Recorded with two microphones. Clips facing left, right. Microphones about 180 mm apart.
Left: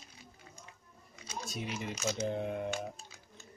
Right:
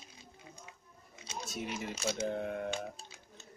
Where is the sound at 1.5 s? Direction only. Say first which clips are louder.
Even; centre (ahead or behind).